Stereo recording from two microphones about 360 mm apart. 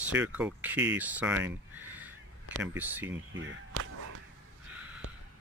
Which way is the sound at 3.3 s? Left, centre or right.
Right.